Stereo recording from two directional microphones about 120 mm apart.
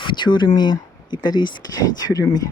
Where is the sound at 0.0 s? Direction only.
40° left (ahead or behind).